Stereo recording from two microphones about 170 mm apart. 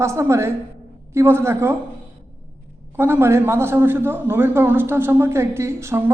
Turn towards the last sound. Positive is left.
turn(degrees=-15)  # may be behind; listen again after turning